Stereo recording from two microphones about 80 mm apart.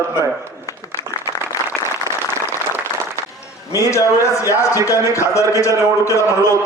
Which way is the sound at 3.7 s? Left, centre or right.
Left.